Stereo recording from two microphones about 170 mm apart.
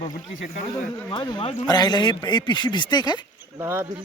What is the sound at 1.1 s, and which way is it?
Speech, 25° left (ahead or behind).